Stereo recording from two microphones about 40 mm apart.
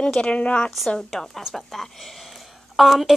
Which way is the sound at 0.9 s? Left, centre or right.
Centre.